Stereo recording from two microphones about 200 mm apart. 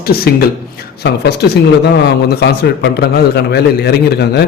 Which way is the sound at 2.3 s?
55° left (ahead or behind).